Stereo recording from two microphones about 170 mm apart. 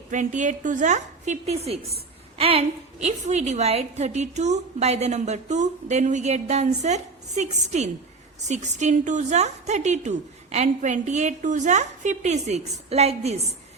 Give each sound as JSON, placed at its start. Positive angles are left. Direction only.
{"t": 0.1, "sound": "a woman's voice", "side_deg": -45}